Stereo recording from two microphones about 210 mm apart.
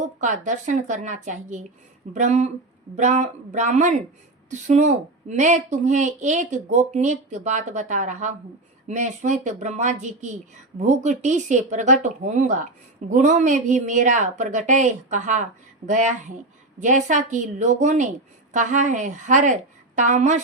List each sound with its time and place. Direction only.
0.0 s speech: 35° right (ahead or behind)